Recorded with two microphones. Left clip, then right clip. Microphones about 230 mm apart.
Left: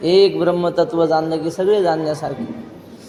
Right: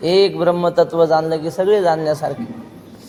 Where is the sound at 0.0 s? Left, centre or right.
Right.